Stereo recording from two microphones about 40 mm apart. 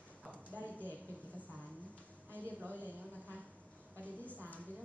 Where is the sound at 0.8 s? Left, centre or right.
Right.